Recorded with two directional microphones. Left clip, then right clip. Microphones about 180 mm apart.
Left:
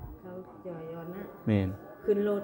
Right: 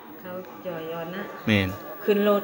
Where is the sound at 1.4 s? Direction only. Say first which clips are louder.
Right 7 dB; 25° left (ahead or behind).